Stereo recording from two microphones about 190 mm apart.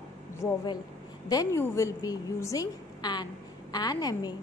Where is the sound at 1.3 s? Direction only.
15° left (ahead or behind).